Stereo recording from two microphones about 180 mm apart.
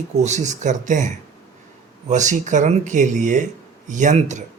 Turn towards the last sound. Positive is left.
turn(degrees=-40)  # may be behind; listen again after turning